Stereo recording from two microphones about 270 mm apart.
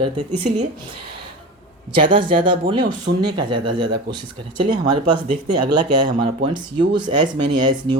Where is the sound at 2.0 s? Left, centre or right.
Centre.